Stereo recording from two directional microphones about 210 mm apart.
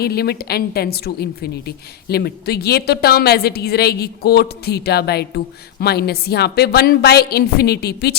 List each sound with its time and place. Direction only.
0.0 s a woman's voice: 50° left (ahead or behind)